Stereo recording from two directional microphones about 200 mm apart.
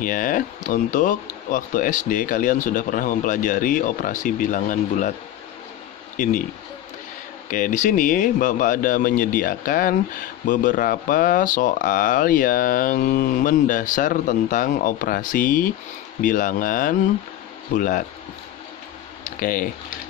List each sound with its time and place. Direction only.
0.0 s speech: 45° left (ahead or behind)
7.4 s speech: 40° left (ahead or behind)
19.2 s speech: 45° left (ahead or behind)